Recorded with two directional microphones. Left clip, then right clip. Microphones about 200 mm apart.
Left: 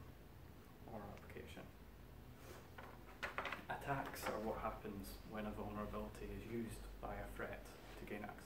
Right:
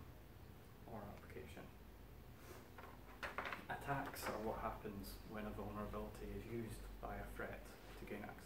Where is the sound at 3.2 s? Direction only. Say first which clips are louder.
Left 1 dB; 15° left (ahead or behind).